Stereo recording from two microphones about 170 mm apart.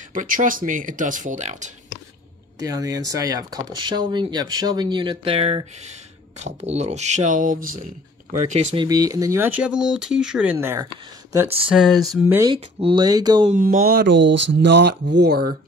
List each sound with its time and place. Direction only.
0.1 s speech: 50° right (ahead or behind)
2.6 s speech: 20° right (ahead or behind); by 8.6 s 45° right (ahead or behind)
8.7 s speech: 20° right (ahead or behind)
11.7 s speech: centre (ahead or behind)
12.4 s speech: 30° right (ahead or behind)
13.5 s speech: 50° right (ahead or behind); by 15.5 s 70° right (ahead or behind)